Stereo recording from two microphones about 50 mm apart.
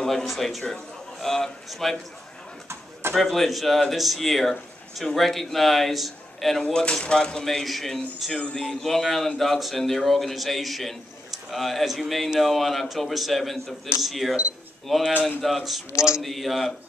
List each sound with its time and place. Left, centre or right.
0.0 s speech: centre
2.7 s a sound: right
3.2 s speech: centre
6.6 s speech: centre
15.9 s a man's voice: left
16.2 s speech: centre